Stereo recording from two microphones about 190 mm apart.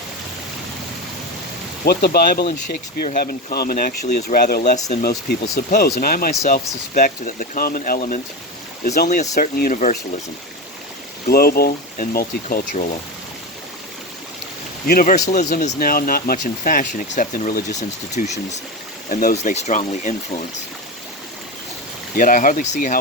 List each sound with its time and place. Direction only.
1.8 s speech: 55° left (ahead or behind)
11.3 s speech: 55° left (ahead or behind)
14.8 s speech: 45° left (ahead or behind)
22.1 s speech: 45° left (ahead or behind)